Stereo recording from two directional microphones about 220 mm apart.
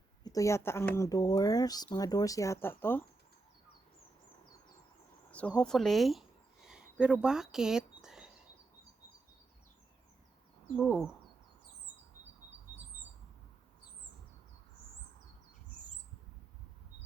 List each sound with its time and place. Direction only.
0.3 s speech: 15° left (ahead or behind)
5.3 s a sound: 5° left (ahead or behind)
7.0 s speech: 5° right (ahead or behind)
10.8 s speech: 5° right (ahead or behind)